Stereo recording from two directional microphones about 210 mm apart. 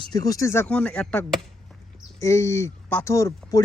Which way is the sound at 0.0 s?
20° left (ahead or behind).